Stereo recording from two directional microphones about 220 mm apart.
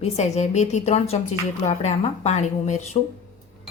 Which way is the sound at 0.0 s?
30° left (ahead or behind).